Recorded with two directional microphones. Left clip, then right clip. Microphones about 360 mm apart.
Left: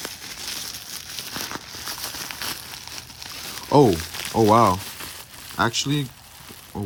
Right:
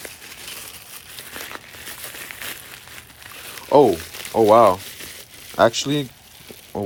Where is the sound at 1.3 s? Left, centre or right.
Centre.